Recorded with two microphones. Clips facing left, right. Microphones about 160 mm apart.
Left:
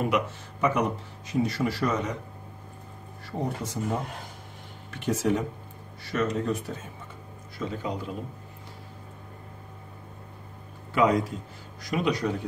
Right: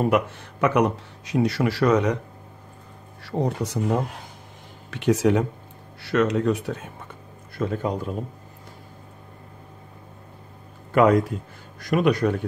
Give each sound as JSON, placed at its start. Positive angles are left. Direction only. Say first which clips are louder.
{"t": 0.4, "sound": "speech", "louder": "right 5 dB", "side_deg": -70}
{"t": 3.3, "sound": "speech", "louder": "right 6 dB", "side_deg": -75}
{"t": 7.5, "sound": "a man's voice", "louder": "right 6 dB", "side_deg": -50}
{"t": 10.9, "sound": "a man's voice", "louder": "right 5 dB", "side_deg": -55}